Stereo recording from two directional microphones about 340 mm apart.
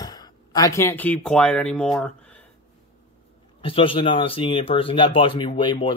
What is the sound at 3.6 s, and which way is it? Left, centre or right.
Speech, centre.